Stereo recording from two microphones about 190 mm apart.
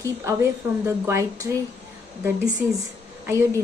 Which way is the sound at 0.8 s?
15° right (ahead or behind).